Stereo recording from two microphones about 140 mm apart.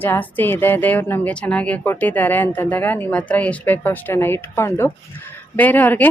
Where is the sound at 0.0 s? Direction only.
15° left (ahead or behind).